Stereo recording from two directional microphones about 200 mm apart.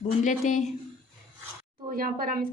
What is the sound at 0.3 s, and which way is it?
Speech, 40° left (ahead or behind).